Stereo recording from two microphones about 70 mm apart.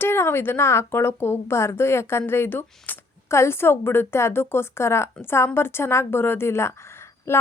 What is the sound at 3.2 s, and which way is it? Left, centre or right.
A woman's voice, left.